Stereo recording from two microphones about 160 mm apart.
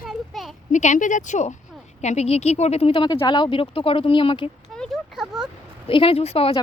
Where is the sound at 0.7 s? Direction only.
50° left (ahead or behind); by 4.4 s 35° left (ahead or behind).